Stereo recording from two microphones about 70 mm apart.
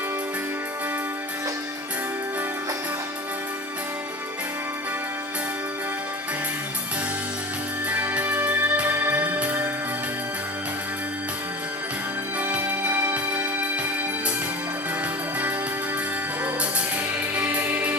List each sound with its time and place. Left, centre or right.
7.9 s music: right
12.4 s music: right
17.3 s music: right